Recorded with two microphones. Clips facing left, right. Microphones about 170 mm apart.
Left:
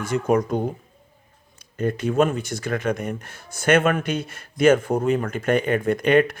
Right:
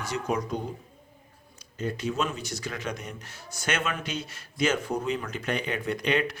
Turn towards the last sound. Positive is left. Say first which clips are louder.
# left 9 dB
turn(degrees=50)  # may be behind; listen again after turning